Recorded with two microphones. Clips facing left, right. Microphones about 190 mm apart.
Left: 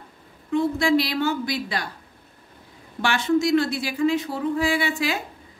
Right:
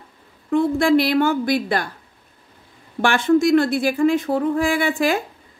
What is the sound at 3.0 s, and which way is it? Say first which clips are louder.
Speech: right 5 dB; 50° right (ahead or behind).